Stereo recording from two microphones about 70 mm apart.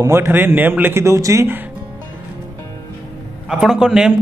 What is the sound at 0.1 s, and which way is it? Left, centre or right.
Speech, right.